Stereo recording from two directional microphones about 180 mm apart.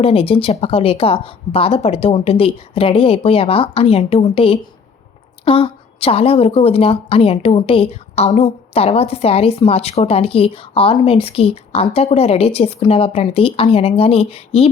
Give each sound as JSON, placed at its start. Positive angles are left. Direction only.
{"t": 0.0, "sound": "a woman's voice", "side_deg": 30}